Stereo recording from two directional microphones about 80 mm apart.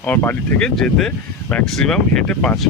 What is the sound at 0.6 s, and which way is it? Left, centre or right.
Speech, centre.